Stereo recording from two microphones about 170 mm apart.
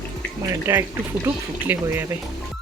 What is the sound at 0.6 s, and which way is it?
Speech, 15° right (ahead or behind).